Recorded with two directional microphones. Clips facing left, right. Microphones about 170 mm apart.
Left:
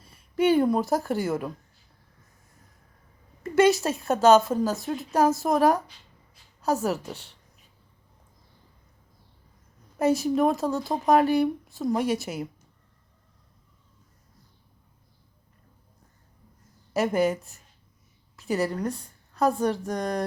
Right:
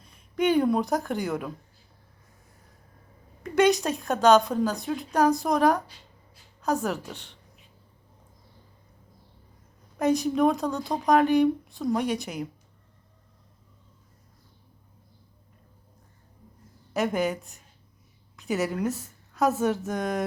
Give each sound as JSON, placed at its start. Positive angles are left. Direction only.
{"t": 0.0, "sound": "speech", "side_deg": 5}
{"t": 3.4, "sound": "speech", "side_deg": 5}
{"t": 7.2, "sound": "a sound", "side_deg": 40}
{"t": 10.0, "sound": "speech", "side_deg": 5}
{"t": 16.9, "sound": "a woman's voice", "side_deg": 0}